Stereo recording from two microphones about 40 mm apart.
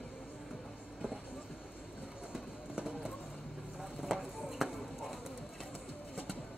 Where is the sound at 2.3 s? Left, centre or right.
Centre.